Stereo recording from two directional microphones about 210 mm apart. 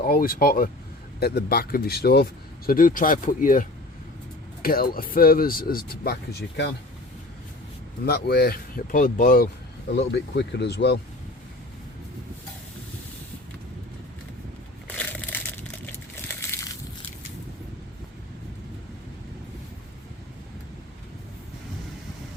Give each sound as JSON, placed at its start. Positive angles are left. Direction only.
{"t": 0.0, "sound": "speech", "side_deg": 45}
{"t": 8.0, "sound": "speech", "side_deg": 50}
{"t": 9.9, "sound": "speech", "side_deg": 55}
{"t": 14.8, "sound": "crushing", "side_deg": 10}